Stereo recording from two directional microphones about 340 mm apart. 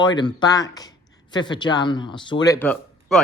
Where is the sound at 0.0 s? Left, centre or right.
Centre.